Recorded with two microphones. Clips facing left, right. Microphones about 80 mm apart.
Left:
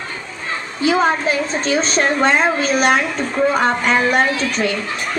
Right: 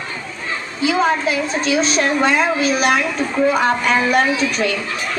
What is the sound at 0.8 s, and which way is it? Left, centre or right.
A woman's voice, left.